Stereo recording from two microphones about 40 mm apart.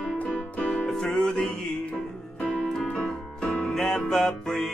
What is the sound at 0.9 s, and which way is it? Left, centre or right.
Music, centre.